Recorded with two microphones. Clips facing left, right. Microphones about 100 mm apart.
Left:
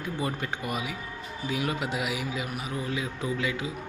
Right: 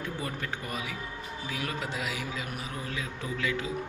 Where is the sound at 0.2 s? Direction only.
20° left (ahead or behind).